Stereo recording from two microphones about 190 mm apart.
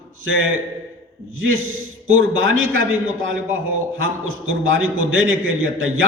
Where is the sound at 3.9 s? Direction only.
90° right.